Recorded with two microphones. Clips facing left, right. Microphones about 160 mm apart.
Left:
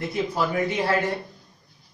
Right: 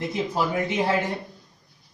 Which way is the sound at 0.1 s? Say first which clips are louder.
Left 1 dB; 20° right (ahead or behind).